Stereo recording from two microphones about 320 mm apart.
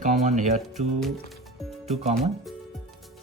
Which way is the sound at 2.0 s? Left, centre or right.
Right.